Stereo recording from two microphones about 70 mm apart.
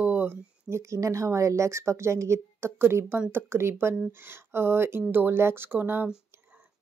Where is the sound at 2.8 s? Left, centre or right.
Right.